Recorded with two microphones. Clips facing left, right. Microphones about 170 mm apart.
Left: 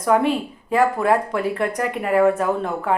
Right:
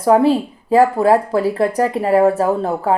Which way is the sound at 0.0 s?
30° right (ahead or behind).